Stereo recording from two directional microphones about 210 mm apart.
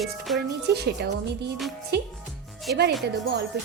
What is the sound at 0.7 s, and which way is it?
Speech, 50° right (ahead or behind).